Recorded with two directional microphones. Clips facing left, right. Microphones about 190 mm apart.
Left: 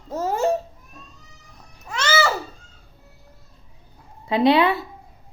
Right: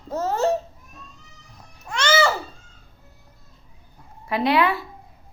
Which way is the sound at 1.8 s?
5° left (ahead or behind).